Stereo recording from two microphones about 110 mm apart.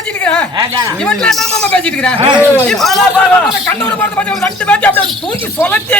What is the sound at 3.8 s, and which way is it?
Speech, 15° left (ahead or behind).